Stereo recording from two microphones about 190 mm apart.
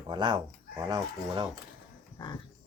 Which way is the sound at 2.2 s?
25° left (ahead or behind).